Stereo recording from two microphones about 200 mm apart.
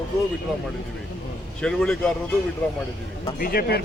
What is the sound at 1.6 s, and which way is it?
Speech, 5° left (ahead or behind).